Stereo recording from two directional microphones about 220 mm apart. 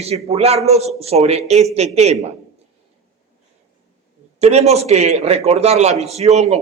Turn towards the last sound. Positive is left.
turn(degrees=-30)  # may be behind; listen again after turning